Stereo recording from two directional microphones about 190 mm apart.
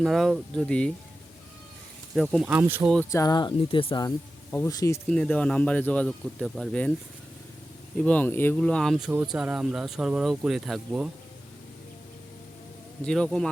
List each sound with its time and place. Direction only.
0.0 s speech: centre (ahead or behind)
2.1 s speech: centre (ahead or behind)
3.1 s speech: 20° left (ahead or behind)
5.0 s speech: 5° left (ahead or behind)
7.9 s speech: 5° left (ahead or behind)
13.1 s speech: 5° left (ahead or behind)